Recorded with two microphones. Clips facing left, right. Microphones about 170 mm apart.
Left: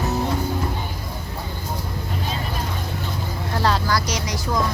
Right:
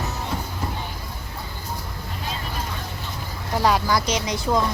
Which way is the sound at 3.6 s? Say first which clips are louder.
Right 1 dB; 15° right (ahead or behind).